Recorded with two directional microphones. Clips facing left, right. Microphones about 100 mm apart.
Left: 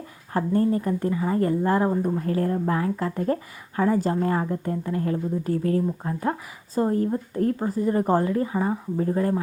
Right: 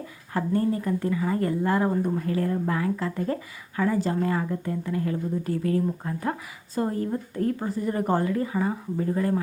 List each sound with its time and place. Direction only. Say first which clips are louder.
0.3 s speech: left 3 dB; 35° left (ahead or behind)